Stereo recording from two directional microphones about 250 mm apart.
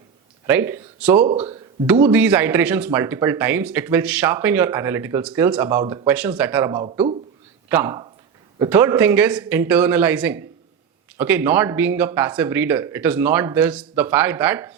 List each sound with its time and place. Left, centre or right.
0.4 s speech: centre
1.3 s speech: right
2.0 s speech: centre